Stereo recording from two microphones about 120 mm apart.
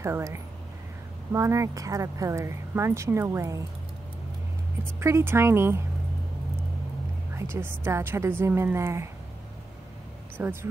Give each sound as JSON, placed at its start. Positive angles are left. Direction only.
{"t": 0.0, "sound": "speech", "side_deg": -20}
{"t": 5.0, "sound": "speech", "side_deg": -20}
{"t": 7.3, "sound": "speech", "side_deg": -20}
{"t": 10.3, "sound": "speech", "side_deg": -20}